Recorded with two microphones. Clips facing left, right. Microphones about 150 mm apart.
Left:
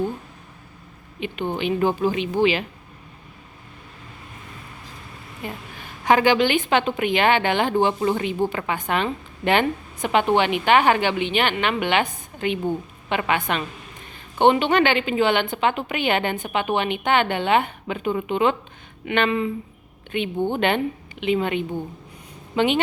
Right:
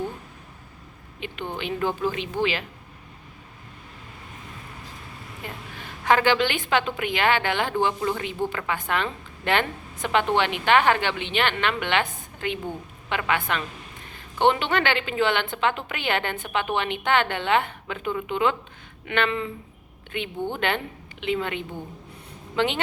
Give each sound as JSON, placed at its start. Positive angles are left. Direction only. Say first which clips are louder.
{"t": 1.2, "sound": "a woman's voice", "louder": "left 6 dB", "side_deg": 15}
{"t": 5.4, "sound": "a woman's voice", "louder": "left 5 dB", "side_deg": 15}